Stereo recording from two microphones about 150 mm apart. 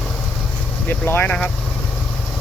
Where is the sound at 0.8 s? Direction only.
10° left (ahead or behind).